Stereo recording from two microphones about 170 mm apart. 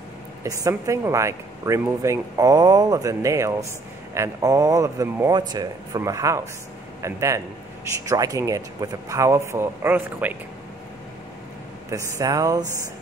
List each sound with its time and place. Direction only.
0.4 s a man's voice: 20° right (ahead or behind)
11.9 s speech: 20° right (ahead or behind)